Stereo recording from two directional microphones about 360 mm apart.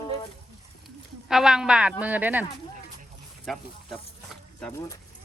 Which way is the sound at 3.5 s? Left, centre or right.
Centre.